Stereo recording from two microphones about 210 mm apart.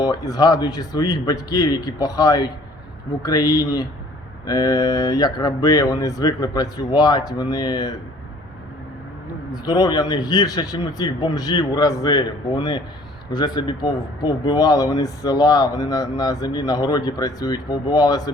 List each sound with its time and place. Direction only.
0.0 s speech: 20° left (ahead or behind)
9.5 s a man's voice: 20° left (ahead or behind)